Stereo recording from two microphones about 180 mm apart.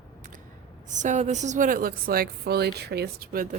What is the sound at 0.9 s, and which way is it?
A woman's voice, 40° right (ahead or behind).